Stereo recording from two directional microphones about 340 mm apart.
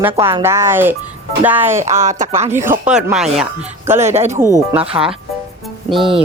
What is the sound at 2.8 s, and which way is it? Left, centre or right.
Speech, centre.